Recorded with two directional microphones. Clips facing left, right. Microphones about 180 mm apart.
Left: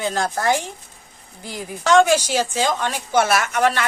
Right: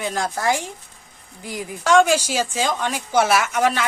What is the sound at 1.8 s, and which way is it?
A woman's voice, 10° right (ahead or behind).